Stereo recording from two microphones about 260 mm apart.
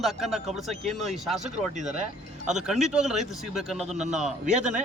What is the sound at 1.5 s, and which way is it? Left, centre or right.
Speech, right.